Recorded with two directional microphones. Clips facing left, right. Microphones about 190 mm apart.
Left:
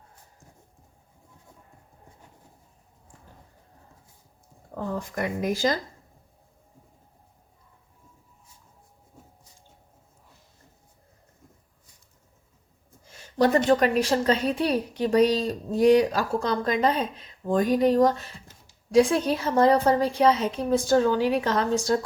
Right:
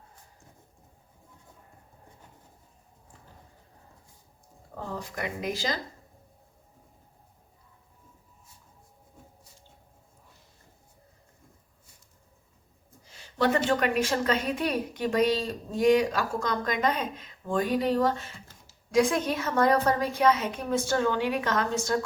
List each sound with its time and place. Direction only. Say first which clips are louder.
4.9 s speech: left 5 dB; 50° left (ahead or behind)
13.1 s a sound: left 4 dB; 40° left (ahead or behind)
13.7 s a woman's voice: left 5 dB; 35° left (ahead or behind)